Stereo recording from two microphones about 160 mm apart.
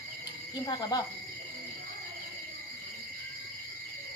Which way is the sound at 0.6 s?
25° left (ahead or behind).